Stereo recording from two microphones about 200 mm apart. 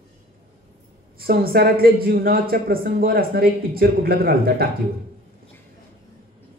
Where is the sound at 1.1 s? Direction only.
50° right (ahead or behind).